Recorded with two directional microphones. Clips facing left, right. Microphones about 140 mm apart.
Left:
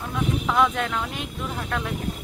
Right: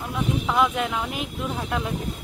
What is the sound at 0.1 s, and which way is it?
Speech, 5° right (ahead or behind).